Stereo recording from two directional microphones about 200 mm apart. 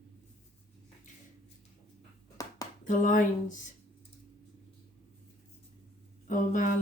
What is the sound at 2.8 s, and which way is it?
Speech, 40° left (ahead or behind).